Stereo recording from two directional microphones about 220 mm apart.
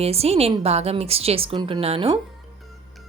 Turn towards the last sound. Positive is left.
turn(degrees=-25)  # may be behind; listen again after turning